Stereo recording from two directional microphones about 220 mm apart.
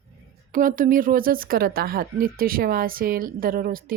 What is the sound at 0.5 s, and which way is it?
Speech, 40° right (ahead or behind).